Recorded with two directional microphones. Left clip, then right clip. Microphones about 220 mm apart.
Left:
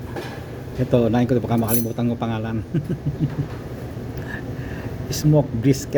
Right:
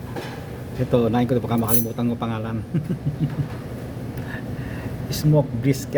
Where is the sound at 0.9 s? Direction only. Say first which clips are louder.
Left 1 dB; centre (ahead or behind).